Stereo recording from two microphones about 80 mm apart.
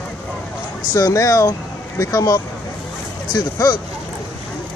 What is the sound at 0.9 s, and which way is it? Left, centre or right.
Speech, left.